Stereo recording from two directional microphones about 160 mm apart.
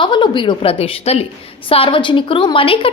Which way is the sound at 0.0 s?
30° left (ahead or behind).